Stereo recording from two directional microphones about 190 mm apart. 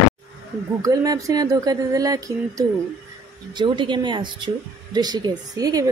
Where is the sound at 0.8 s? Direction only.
20° right (ahead or behind).